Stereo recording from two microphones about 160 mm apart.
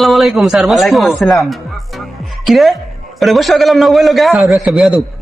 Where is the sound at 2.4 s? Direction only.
Centre (ahead or behind).